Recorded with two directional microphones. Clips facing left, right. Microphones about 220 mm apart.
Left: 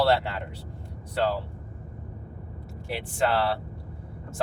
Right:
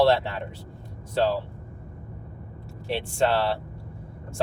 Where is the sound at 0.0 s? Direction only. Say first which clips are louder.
Right 3 dB; 25° right (ahead or behind).